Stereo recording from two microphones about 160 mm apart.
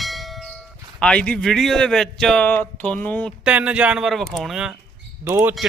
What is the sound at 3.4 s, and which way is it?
Speech, 5° right (ahead or behind).